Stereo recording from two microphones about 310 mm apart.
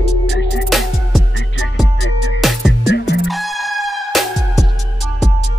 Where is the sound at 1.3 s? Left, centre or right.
Left.